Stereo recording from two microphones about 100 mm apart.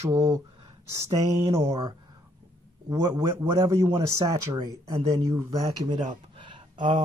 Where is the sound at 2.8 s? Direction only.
30° right (ahead or behind).